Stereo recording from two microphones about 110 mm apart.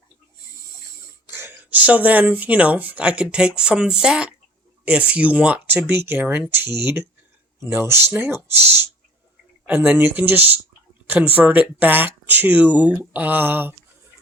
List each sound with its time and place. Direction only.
1.3 s speech: 20° right (ahead or behind)